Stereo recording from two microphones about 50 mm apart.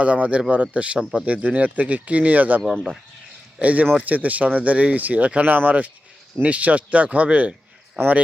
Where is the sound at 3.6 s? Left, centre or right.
Right.